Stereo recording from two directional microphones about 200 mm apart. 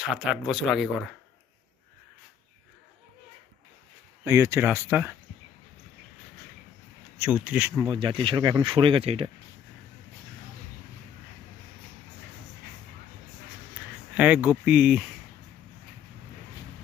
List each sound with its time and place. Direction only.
0.0 s speech: 5° right (ahead or behind)
4.2 s speech: 15° right (ahead or behind)
7.2 s speech: 5° right (ahead or behind)
7.9 s speech: 25° right (ahead or behind)
14.2 s speech: 5° right (ahead or behind)